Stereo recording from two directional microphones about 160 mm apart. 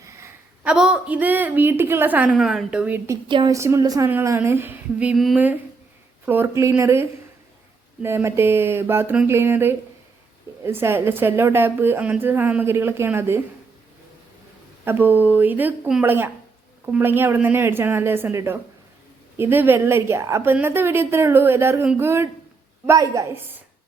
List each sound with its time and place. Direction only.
0.6 s a woman's voice: 5° right (ahead or behind)
3.2 s a woman's voice: 30° right (ahead or behind)
3.5 s a woman's voice: 20° right (ahead or behind); by 5.4 s centre (ahead or behind)
6.2 s a woman's voice: 15° right (ahead or behind)
14.8 s a woman's voice: 10° right (ahead or behind)